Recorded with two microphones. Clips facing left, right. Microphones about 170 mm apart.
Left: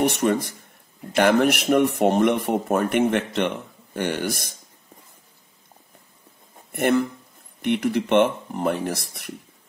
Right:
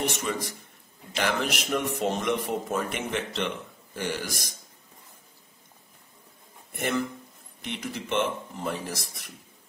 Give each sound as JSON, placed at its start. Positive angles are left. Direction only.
{"t": 0.0, "sound": "a man's voice", "side_deg": 55}
{"t": 6.7, "sound": "a man's voice", "side_deg": 60}